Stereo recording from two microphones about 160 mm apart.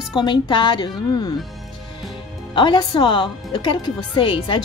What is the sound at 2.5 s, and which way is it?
A woman's voice, 30° left (ahead or behind).